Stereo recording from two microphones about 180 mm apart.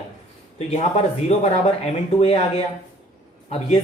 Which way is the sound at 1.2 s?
35° left (ahead or behind).